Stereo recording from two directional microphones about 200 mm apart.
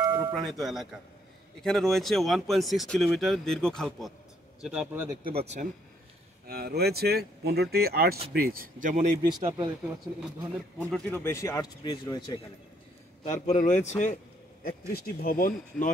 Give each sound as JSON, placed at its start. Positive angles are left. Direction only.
{"t": 0.0, "sound": "music", "side_deg": -15}
{"t": 0.3, "sound": "speech", "side_deg": 0}
{"t": 5.2, "sound": "speech", "side_deg": -30}
{"t": 6.4, "sound": "speech", "side_deg": -50}
{"t": 9.2, "sound": "speech", "side_deg": -15}
{"t": 10.8, "sound": "speech", "side_deg": 10}
{"t": 13.3, "sound": "a man's voice", "side_deg": 35}
{"t": 13.7, "sound": "speech", "side_deg": 10}
{"t": 14.9, "sound": "speech", "side_deg": 45}